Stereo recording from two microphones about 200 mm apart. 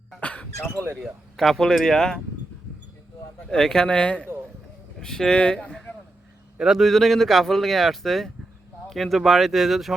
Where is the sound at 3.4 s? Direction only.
5° left (ahead or behind).